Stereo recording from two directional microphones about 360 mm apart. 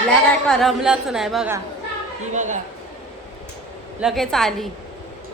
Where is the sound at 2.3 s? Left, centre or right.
Centre.